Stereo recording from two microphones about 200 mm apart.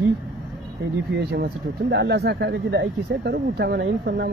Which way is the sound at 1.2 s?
55° right (ahead or behind).